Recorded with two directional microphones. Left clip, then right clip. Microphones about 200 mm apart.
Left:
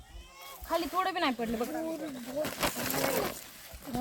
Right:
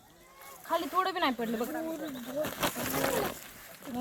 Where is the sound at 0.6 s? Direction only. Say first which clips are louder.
Even; 5° right (ahead or behind).